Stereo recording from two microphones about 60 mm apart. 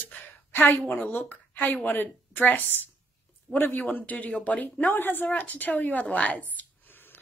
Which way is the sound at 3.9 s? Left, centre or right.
Left.